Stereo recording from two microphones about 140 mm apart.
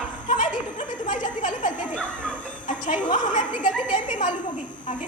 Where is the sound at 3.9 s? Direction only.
65° left (ahead or behind).